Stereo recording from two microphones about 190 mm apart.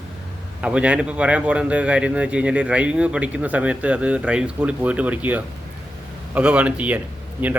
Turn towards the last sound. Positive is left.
turn(degrees=-10)  # may be behind; listen again after turning